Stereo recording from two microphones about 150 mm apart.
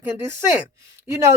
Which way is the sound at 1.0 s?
20° right (ahead or behind).